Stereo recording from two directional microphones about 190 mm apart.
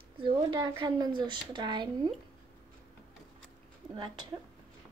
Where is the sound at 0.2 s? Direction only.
25° right (ahead or behind).